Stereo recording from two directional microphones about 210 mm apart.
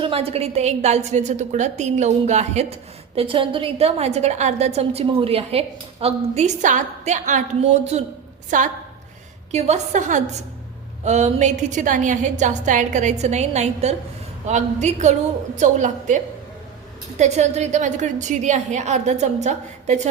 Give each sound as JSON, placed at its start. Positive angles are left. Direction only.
{"t": 0.0, "sound": "a woman's voice", "side_deg": -25}